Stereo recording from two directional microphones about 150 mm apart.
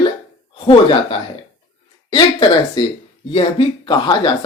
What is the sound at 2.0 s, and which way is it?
Speech, 30° left (ahead or behind).